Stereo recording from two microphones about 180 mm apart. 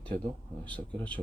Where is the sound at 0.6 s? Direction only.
5° left (ahead or behind).